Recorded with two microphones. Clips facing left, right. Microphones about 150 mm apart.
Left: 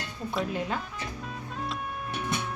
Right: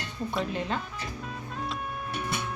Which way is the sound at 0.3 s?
10° left (ahead or behind).